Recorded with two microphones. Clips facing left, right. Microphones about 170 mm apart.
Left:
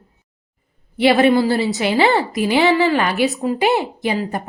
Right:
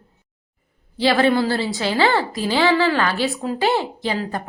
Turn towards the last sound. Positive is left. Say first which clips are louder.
# left 3 dB
turn(degrees=20)  # may be behind; listen again after turning